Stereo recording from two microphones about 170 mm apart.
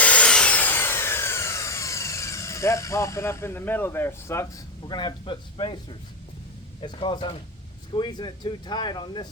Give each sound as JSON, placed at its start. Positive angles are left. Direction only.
{"t": 0.0, "sound": "a sound", "side_deg": 5}
{"t": 4.9, "sound": "speech", "side_deg": 25}
{"t": 6.8, "sound": "speech", "side_deg": 30}